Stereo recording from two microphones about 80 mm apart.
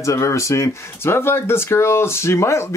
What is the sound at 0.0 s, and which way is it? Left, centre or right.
Speech, left.